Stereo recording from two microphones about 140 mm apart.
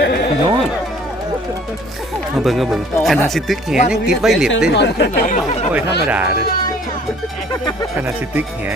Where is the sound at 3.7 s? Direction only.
90° left.